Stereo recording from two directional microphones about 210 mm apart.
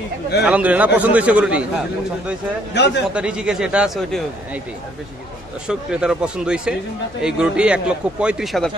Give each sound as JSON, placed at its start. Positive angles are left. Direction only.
{"t": 0.5, "sound": "a man's voice", "side_deg": -5}
{"t": 2.7, "sound": "a man's voice", "side_deg": 55}
{"t": 3.2, "sound": "a man's voice", "side_deg": -5}
{"t": 5.7, "sound": "a man's voice", "side_deg": -5}